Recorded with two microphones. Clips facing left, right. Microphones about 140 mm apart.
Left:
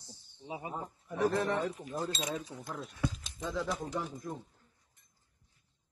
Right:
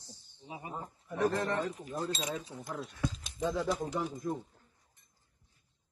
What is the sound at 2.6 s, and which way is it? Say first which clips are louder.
Speech: right 2 dB; centre (ahead or behind).